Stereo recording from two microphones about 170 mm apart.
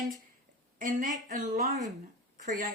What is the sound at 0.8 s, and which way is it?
Speech, 50° right (ahead or behind).